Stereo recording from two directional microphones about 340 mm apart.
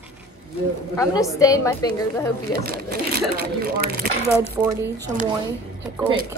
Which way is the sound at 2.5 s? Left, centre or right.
Right.